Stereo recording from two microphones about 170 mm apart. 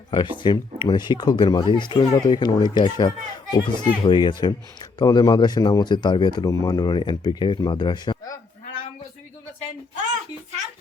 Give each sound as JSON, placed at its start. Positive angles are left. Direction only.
{"t": 0.1, "sound": "speech", "side_deg": 30}